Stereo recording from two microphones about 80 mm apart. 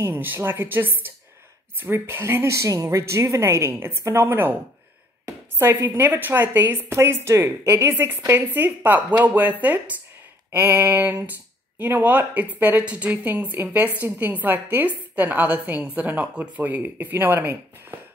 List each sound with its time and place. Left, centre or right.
0.0 s a woman's voice: right
5.6 s a woman's voice: right
7.9 s a woman's voice: right
10.5 s a woman's voice: right